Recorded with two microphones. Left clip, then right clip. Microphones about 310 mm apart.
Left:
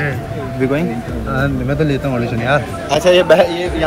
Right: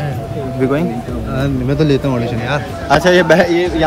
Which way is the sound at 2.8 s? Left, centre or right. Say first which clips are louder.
Right 2 dB; centre.